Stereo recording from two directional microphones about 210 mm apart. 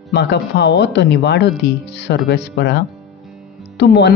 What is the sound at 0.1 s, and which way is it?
Speech, 55° left (ahead or behind).